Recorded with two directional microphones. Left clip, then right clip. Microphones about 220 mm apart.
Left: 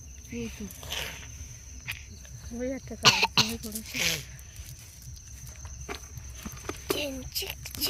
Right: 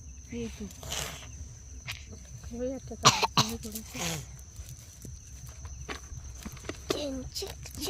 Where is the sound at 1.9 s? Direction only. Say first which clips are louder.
Left 3 dB; 50° right (ahead or behind).